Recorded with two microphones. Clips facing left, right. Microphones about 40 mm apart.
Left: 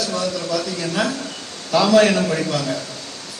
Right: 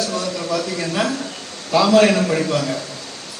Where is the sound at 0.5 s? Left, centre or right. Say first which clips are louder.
Right 4 dB; right.